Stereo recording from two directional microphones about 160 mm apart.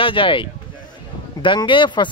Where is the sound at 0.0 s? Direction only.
35° left (ahead or behind).